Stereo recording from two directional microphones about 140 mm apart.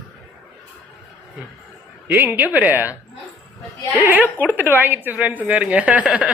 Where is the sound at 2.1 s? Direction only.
15° right (ahead or behind).